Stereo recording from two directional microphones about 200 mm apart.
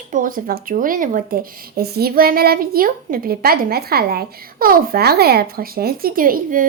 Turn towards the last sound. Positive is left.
turn(degrees=-45)  # may be behind; listen again after turning